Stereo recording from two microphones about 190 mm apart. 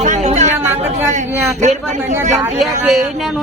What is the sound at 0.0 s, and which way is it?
Chatter, 40° right (ahead or behind).